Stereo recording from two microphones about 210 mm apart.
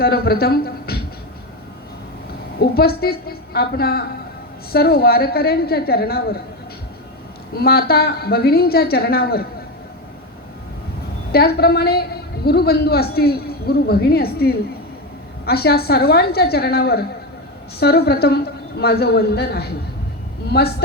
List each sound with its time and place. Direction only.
0.0 s speech: 45° left (ahead or behind)
2.6 s a man's voice: 45° left (ahead or behind)
7.5 s a man's voice: 45° left (ahead or behind)
11.3 s a man's voice: 50° left (ahead or behind)